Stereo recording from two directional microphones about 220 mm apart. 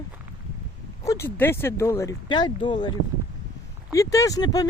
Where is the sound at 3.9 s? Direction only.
15° left (ahead or behind).